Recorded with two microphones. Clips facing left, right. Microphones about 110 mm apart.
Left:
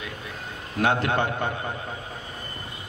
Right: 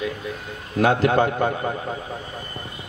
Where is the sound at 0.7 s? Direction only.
35° right (ahead or behind).